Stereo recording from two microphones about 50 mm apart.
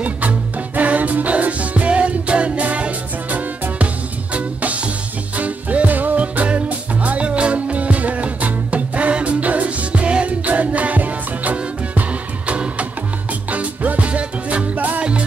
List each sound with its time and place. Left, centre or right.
0.0 s music: right